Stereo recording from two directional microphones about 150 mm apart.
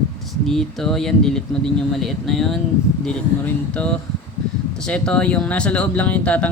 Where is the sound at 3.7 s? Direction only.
5° left (ahead or behind).